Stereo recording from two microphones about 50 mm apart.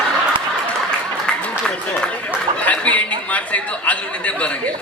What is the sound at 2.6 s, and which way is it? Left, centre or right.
A man's voice, left.